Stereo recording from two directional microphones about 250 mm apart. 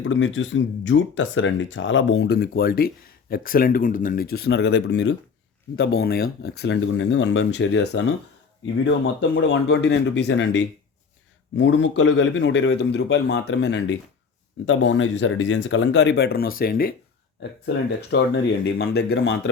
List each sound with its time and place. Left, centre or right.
0.0 s speech: left
18.1 s speech: left